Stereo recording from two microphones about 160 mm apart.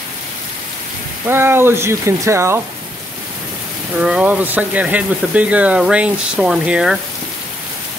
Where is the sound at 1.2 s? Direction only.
15° right (ahead or behind).